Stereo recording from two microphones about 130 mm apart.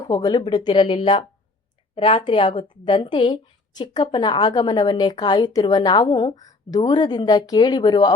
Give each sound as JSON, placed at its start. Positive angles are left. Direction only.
{"t": 0.0, "sound": "a woman's voice", "side_deg": 30}